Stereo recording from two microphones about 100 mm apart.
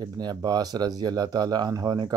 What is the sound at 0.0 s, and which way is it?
Speech, 45° right (ahead or behind).